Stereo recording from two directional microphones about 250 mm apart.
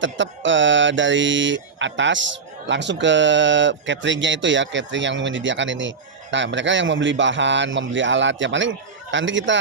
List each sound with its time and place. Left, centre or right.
0.0 s speech: right